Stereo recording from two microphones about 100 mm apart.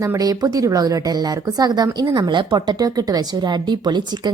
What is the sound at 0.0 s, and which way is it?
Speech, 35° right (ahead or behind).